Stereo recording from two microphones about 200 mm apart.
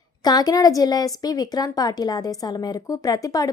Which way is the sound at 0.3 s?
20° left (ahead or behind).